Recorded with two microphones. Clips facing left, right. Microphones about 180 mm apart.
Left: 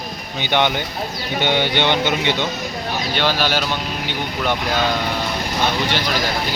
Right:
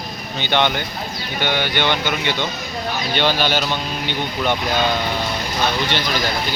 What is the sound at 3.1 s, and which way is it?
Speech, 5° left (ahead or behind).